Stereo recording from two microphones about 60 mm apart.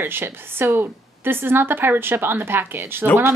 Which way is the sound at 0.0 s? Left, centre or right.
Right.